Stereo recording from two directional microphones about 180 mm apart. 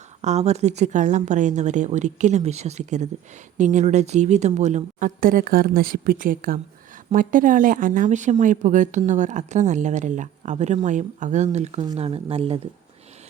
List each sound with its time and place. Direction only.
0.2 s speech: 40° right (ahead or behind)